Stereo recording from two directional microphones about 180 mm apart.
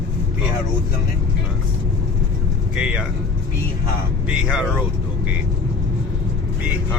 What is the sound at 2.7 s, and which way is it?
Speech, 5° right (ahead or behind).